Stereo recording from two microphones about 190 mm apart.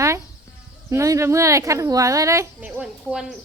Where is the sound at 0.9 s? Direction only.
15° right (ahead or behind).